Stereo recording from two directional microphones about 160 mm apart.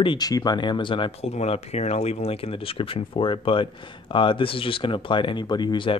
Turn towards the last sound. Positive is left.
turn(degrees=30)  # may be behind; listen again after turning